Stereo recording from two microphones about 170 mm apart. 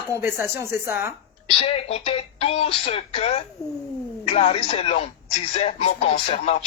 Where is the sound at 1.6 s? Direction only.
35° left (ahead or behind).